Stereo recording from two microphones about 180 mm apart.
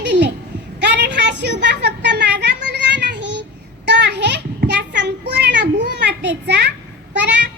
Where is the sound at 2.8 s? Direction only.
80° right.